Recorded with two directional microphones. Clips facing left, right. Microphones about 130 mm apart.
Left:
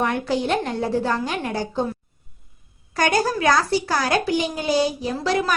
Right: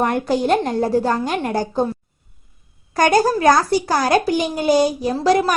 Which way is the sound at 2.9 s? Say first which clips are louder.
Right 5 dB; 45° right (ahead or behind).